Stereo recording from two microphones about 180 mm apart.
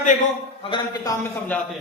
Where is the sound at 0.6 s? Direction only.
25° left (ahead or behind).